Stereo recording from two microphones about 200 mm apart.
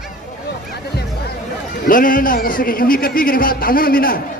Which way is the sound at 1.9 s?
45° left (ahead or behind).